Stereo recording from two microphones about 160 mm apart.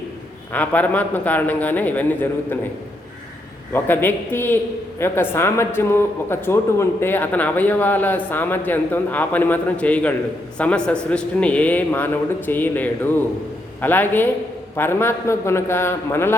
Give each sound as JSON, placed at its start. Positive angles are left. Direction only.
{"t": 0.5, "sound": "speech", "side_deg": 10}
{"t": 3.7, "sound": "speech", "side_deg": 15}